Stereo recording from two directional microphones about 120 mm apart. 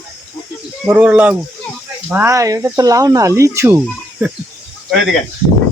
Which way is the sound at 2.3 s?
25° right (ahead or behind).